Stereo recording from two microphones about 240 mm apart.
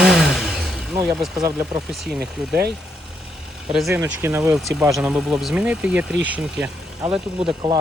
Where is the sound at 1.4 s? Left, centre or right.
Centre.